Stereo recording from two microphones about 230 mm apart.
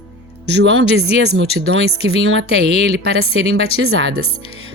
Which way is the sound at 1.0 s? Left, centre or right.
Left.